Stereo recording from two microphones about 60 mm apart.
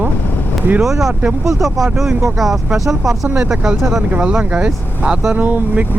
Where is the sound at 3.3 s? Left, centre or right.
Centre.